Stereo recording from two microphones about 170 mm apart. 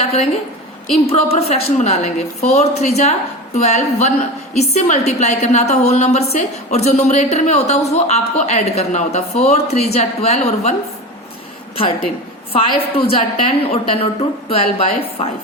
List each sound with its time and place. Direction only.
0.0 s a woman's voice: 35° left (ahead or behind)
12.5 s a woman's voice: 30° left (ahead or behind)